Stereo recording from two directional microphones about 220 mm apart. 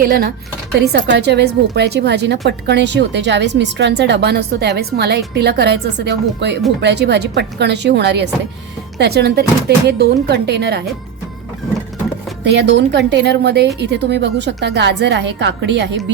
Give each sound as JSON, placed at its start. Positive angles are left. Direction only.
{"t": 0.0, "sound": "a woman's voice", "side_deg": -45}
{"t": 12.5, "sound": "a woman's voice", "side_deg": -50}